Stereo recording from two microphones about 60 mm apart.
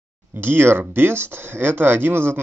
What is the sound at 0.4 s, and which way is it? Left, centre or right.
Speech, right.